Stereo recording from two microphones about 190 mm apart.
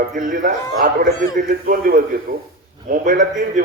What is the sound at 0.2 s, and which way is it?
A man's voice, 45° right (ahead or behind).